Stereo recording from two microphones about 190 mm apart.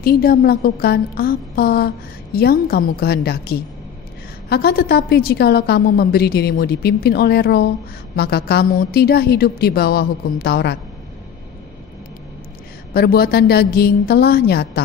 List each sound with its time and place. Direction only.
0.0 s a woman's voice: 50° left (ahead or behind)
12.9 s a woman's voice: 55° left (ahead or behind)